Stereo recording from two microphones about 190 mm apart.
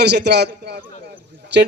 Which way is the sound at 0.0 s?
60° right (ahead or behind).